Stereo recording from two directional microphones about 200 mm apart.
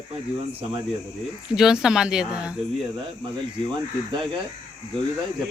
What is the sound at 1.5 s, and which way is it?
Speech, 5° right (ahead or behind).